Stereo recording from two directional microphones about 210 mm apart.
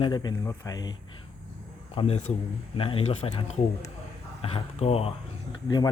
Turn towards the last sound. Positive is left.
turn(degrees=20)  # may be behind; listen again after turning